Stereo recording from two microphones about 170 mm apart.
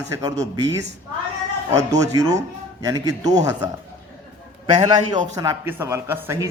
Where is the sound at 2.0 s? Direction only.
20° right (ahead or behind).